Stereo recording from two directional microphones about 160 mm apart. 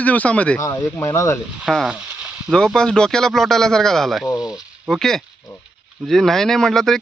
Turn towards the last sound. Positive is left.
turn(degrees=0)  # may be behind; listen again after turning